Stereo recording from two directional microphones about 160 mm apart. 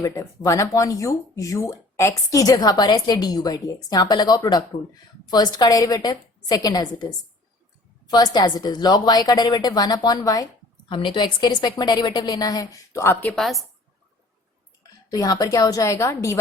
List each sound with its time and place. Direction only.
0.0 s a woman's voice: 20° left (ahead or behind)
8.1 s a woman's voice: 25° left (ahead or behind)
13.3 s a woman's voice: centre (ahead or behind)
15.1 s a woman's voice: 25° left (ahead or behind)